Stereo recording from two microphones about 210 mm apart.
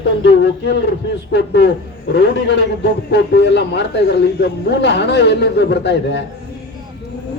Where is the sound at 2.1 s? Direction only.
55° left (ahead or behind).